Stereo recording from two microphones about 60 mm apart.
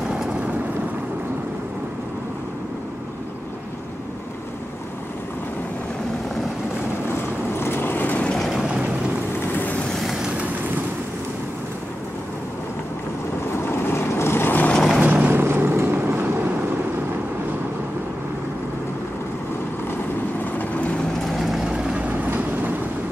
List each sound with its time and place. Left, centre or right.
7.5 s vehicle: left
8.4 s vehicle: centre
9.5 s vehicle: left
9.9 s vehicle: centre
13.7 s vehicle: left
14.7 s vehicle: centre
15.0 s vehicle: right
15.4 s vehicle: right
20.5 s vehicle: left
21.3 s vehicle: centre
21.7 s vehicle: centre